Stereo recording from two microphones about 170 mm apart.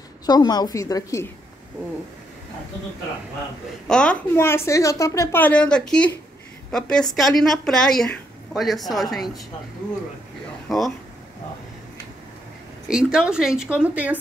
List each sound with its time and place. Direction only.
0.3 s a woman's voice: 25° left (ahead or behind)
3.8 s a woman's voice: 5° left (ahead or behind)
12.8 s a woman's voice: 5° right (ahead or behind)